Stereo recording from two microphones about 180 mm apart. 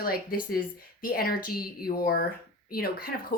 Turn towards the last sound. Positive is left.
turn(degrees=55)  # may be behind; listen again after turning